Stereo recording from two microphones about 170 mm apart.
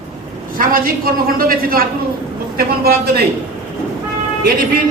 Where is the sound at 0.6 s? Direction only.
60° right (ahead or behind).